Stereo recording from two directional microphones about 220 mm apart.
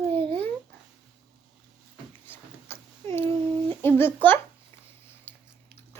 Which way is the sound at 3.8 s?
10° left (ahead or behind).